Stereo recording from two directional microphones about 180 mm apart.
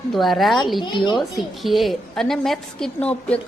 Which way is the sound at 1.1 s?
Centre (ahead or behind).